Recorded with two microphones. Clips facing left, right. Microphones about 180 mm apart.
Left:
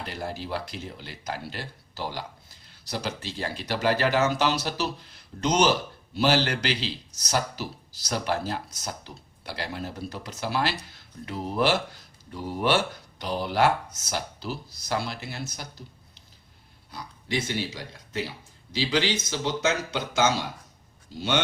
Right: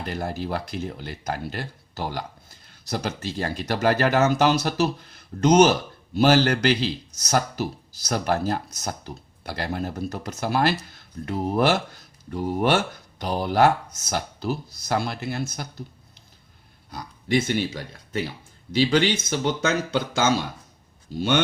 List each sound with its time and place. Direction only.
0.0 s speech: 50° right (ahead or behind)
16.9 s speech: 50° right (ahead or behind)